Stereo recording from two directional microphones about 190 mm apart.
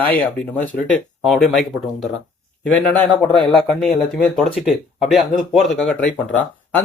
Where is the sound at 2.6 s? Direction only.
10° left (ahead or behind).